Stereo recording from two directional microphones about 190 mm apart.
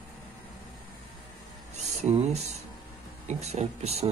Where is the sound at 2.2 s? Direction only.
35° right (ahead or behind).